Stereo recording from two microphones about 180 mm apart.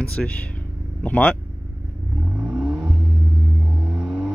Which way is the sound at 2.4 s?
5° right (ahead or behind).